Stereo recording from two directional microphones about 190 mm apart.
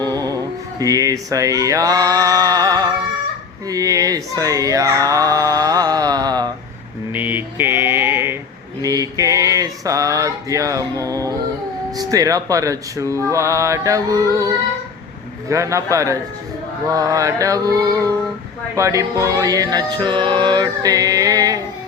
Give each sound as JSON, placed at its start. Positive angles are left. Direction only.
{"t": 0.0, "sound": "mantra", "side_deg": -20}
{"t": 0.8, "sound": "speech", "side_deg": -20}
{"t": 7.1, "sound": "mantra", "side_deg": -10}
{"t": 8.8, "sound": "speech", "side_deg": -20}